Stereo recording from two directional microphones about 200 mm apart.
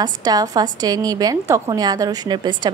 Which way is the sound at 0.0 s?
20° right (ahead or behind).